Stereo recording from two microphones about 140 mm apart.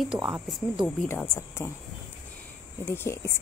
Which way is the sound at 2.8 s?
20° left (ahead or behind).